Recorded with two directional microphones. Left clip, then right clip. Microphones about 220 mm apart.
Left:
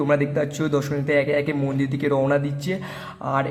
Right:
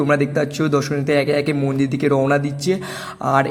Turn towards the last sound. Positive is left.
turn(degrees=-20)  # may be behind; listen again after turning